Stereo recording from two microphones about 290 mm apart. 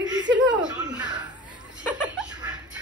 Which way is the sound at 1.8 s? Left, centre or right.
Centre.